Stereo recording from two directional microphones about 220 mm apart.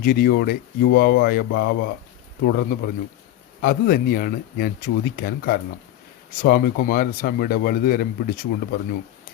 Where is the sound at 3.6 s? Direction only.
40° left (ahead or behind).